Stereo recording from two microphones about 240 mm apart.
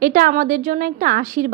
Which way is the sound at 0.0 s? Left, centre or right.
Right.